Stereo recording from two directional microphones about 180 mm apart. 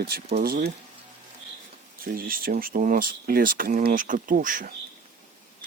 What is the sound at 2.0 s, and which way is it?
Speech, 55° right (ahead or behind).